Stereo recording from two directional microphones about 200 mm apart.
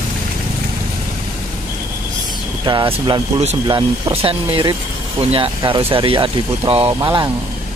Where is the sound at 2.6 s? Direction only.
25° right (ahead or behind).